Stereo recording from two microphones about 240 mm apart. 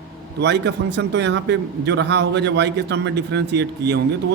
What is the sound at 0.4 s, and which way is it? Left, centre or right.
A man's voice, right.